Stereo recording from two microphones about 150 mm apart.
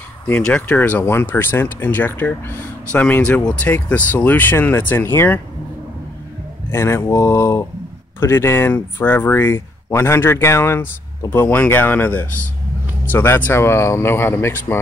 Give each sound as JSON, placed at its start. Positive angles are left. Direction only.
{"t": 0.3, "sound": "speech", "side_deg": 10}
{"t": 6.7, "sound": "speech", "side_deg": 15}